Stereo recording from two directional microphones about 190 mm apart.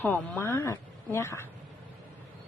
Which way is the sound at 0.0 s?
10° left (ahead or behind).